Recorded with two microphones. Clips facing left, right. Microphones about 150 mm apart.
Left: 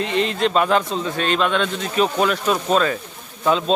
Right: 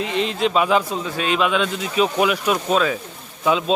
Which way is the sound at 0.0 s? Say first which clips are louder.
Left 1 dB; centre (ahead or behind).